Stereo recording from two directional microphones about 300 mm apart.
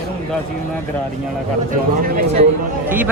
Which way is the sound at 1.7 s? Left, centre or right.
Right.